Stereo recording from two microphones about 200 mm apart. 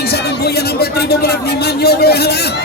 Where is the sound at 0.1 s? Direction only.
50° left (ahead or behind).